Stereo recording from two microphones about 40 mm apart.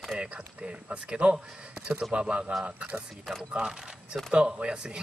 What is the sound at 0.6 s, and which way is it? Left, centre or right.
A man's voice, right.